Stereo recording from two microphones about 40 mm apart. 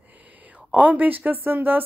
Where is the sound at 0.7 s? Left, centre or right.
Right.